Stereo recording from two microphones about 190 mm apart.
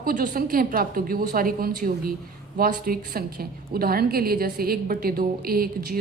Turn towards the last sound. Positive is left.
turn(degrees=-50)  # may be behind; listen again after turning